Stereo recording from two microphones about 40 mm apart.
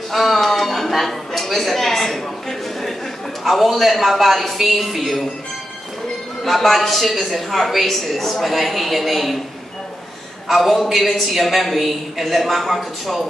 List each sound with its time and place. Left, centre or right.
0.1 s a sound: centre
3.4 s a woman's voice: centre
6.4 s a woman's voice: centre
10.5 s a woman's voice: centre